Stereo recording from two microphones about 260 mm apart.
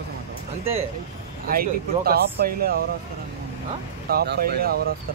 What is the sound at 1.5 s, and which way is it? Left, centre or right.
Speech, right.